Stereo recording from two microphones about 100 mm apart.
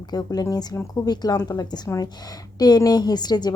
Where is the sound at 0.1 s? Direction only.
40° left (ahead or behind).